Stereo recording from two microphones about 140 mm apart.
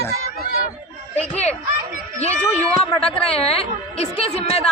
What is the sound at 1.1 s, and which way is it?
Speech, 50° left (ahead or behind).